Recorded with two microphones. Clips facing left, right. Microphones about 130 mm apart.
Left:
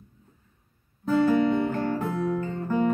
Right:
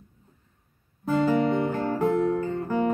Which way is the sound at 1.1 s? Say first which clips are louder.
Left 1 dB; 15° right (ahead or behind).